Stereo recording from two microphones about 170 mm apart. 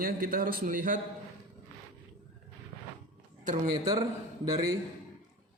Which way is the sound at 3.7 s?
25° right (ahead or behind).